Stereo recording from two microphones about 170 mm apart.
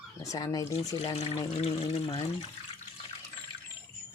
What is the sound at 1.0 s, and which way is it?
Speech, 35° left (ahead or behind).